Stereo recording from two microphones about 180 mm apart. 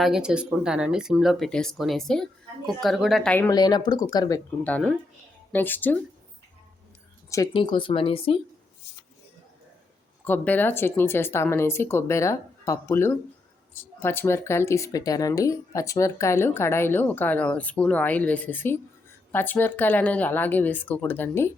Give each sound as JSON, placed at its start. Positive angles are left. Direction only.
{"t": 0.0, "sound": "speech", "side_deg": -5}
{"t": 3.5, "sound": "speech", "side_deg": 25}
{"t": 4.6, "sound": "speech", "side_deg": 5}
{"t": 7.5, "sound": "speech", "side_deg": 30}
{"t": 10.2, "sound": "speech", "side_deg": 10}